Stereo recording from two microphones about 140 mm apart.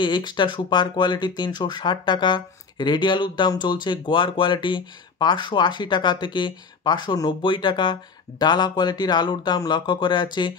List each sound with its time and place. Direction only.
0.0 s speech: 35° left (ahead or behind)